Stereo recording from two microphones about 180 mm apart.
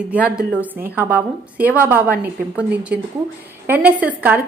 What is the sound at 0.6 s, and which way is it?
Speech, 10° right (ahead or behind).